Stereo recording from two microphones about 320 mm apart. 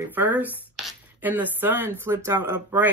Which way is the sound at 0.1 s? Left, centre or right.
Centre.